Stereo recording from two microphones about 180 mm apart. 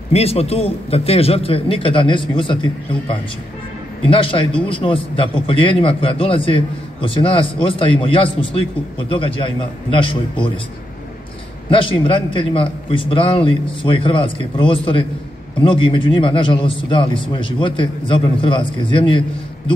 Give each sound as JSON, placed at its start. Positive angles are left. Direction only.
{"t": 0.1, "sound": "a man's voice", "side_deg": 35}
{"t": 11.7, "sound": "a man's voice", "side_deg": 30}